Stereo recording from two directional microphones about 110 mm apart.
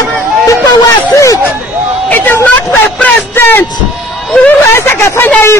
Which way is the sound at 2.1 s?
15° left (ahead or behind).